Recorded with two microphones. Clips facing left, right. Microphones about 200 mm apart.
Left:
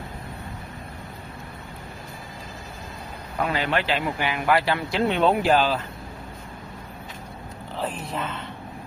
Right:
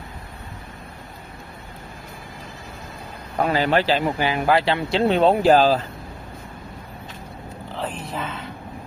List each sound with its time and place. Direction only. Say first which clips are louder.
3.4 s speech: right 5 dB; 35° right (ahead or behind)
7.7 s speech: even; centre (ahead or behind)